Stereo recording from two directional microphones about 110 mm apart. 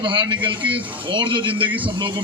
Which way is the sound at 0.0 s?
45° right (ahead or behind).